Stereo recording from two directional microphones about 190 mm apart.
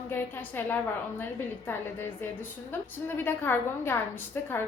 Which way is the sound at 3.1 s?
10° left (ahead or behind).